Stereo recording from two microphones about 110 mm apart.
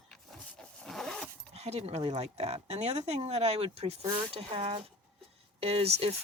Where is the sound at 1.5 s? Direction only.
75° right (ahead or behind).